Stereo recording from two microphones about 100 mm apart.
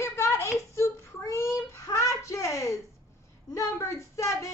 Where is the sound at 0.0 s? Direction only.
30° left (ahead or behind).